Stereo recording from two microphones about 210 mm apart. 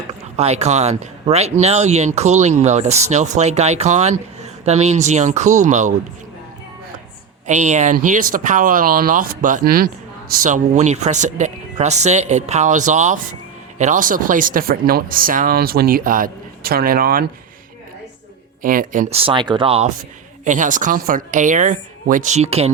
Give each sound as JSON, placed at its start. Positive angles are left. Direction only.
{"t": 0.1, "sound": "speech", "side_deg": -30}
{"t": 7.4, "sound": "speech", "side_deg": -35}
{"t": 18.6, "sound": "speech", "side_deg": -40}
{"t": 19.1, "sound": "speech", "side_deg": -25}